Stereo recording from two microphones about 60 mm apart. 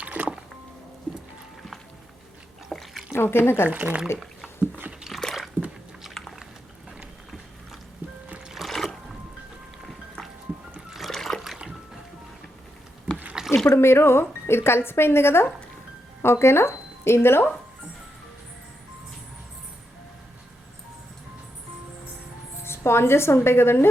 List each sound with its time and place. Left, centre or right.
0.0 s music: right
2.6 s drip: centre
3.1 s speech: left
3.7 s speech: right
4.9 s a sound: centre
5.2 s squish: centre
8.4 s a sound: centre
8.7 s a sound: centre
10.8 s trickle: centre
13.4 s a sound: centre
13.7 s speech: left
22.6 s speech: left